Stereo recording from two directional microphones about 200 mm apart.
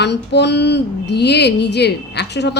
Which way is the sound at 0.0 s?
55° left (ahead or behind).